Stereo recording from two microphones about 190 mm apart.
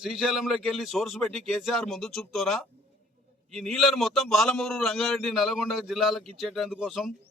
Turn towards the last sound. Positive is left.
turn(degrees=0)  # may be behind; listen again after turning